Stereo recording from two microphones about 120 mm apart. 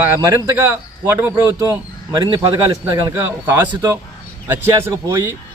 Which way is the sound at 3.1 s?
20° right (ahead or behind).